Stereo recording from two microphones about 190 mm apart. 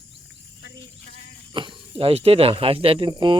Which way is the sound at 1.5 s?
25° right (ahead or behind).